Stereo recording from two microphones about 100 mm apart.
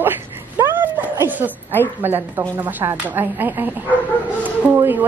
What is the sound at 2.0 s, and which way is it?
Speech, 20° right (ahead or behind).